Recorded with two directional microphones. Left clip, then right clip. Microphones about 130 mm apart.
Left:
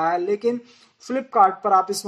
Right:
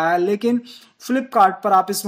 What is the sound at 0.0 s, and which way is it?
Speech, 35° right (ahead or behind).